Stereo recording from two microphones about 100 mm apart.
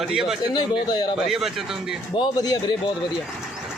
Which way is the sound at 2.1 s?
45° left (ahead or behind).